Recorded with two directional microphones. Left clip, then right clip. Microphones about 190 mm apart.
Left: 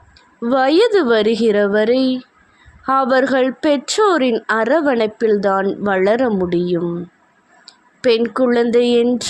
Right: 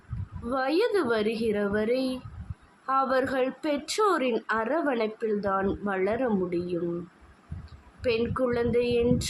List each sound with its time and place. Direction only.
0.5 s a woman's voice: 40° left (ahead or behind)